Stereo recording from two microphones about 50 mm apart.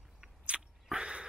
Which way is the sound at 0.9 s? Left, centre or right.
Centre.